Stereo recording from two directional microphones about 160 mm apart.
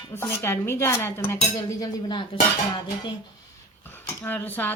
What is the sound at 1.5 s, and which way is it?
Speech, 25° left (ahead or behind).